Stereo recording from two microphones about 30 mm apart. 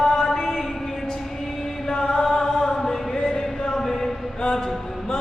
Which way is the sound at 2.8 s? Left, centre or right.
Centre.